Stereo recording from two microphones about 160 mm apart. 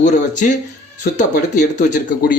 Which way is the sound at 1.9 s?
70° left (ahead or behind).